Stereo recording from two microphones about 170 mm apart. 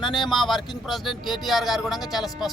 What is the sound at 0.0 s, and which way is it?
Speech, 25° left (ahead or behind).